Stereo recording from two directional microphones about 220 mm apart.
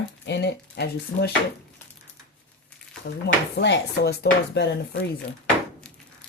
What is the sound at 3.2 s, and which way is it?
Speech, 50° left (ahead or behind).